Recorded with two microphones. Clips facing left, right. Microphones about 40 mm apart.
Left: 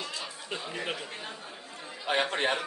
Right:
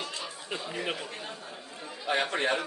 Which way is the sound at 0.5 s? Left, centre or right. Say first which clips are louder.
Right 1 dB; centre.